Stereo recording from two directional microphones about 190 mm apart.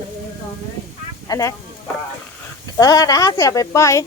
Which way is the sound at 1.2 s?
20° left (ahead or behind).